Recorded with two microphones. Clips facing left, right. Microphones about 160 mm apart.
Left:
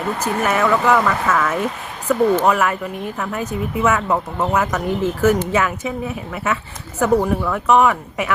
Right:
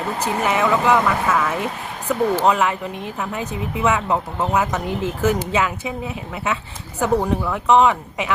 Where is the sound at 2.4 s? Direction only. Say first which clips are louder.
Left 1 dB; 20° right (ahead or behind).